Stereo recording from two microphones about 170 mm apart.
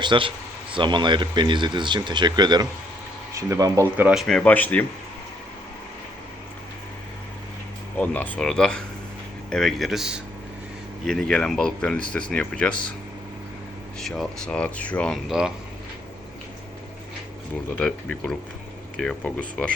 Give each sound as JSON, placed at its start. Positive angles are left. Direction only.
{"t": 0.0, "sound": "speech", "side_deg": -30}
{"t": 3.9, "sound": "speech", "side_deg": -5}
{"t": 7.9, "sound": "speech", "side_deg": 10}
{"t": 14.0, "sound": "speech", "side_deg": 5}
{"t": 17.7, "sound": "speech", "side_deg": 5}